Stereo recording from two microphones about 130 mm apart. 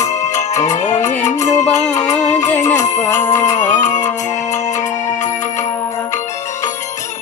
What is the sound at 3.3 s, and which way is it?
Music, 70° left (ahead or behind).